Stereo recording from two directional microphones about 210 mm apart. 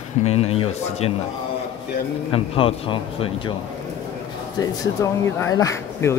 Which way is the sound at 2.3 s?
25° left (ahead or behind).